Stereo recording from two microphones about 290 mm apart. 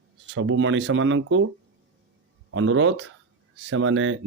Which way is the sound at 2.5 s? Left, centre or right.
Right.